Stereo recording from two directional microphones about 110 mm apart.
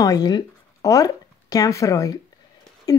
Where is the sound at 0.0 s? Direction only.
35° left (ahead or behind).